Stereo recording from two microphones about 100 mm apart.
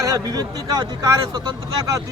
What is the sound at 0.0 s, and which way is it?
A man's voice, 40° right (ahead or behind).